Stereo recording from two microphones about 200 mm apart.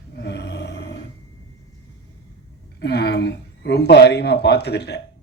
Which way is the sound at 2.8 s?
55° left (ahead or behind).